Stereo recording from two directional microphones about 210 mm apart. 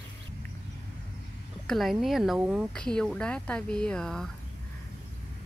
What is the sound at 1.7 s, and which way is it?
A woman's voice, centre (ahead or behind).